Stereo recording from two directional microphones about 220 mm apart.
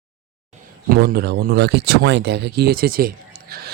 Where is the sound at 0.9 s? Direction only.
45° right (ahead or behind).